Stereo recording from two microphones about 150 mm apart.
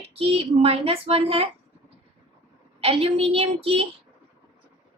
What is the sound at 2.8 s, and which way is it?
A woman's voice, 40° right (ahead or behind).